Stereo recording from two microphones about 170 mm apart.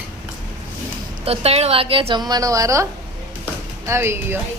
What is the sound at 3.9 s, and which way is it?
Speech, 15° right (ahead or behind).